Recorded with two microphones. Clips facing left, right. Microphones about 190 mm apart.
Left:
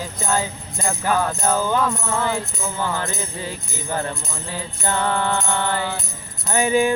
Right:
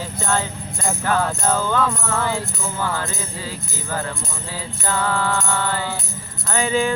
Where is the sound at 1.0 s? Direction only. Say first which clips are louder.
Even; 10° left (ahead or behind).